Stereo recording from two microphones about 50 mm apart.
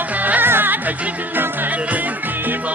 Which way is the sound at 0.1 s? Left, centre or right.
Right.